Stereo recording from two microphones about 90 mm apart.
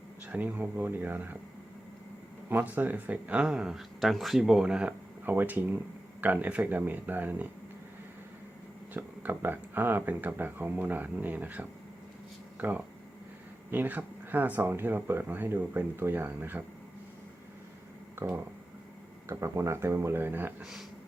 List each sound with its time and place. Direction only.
0.3 s speech: 20° right (ahead or behind)
2.5 s speech: 20° right (ahead or behind)
8.9 s speech: 20° right (ahead or behind)
19.3 s speech: 35° right (ahead or behind)
20.6 s speech: 5° right (ahead or behind)